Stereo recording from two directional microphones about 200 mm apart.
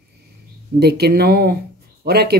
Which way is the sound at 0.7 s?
55° right (ahead or behind).